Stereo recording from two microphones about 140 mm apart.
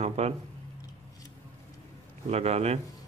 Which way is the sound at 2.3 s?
50° right (ahead or behind).